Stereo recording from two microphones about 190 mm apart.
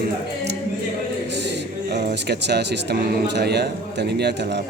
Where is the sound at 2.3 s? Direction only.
60° right (ahead or behind).